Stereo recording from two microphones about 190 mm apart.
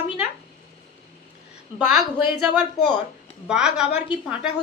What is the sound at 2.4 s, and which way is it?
A woman's voice, 5° right (ahead or behind).